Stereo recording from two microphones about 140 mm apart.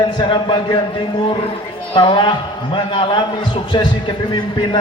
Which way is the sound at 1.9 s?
35° left (ahead or behind).